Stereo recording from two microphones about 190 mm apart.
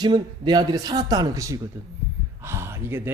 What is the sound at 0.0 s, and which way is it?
A man's voice, 20° right (ahead or behind).